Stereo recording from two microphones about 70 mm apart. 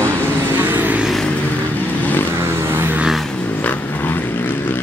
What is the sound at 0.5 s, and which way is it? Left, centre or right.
Vehicle, right.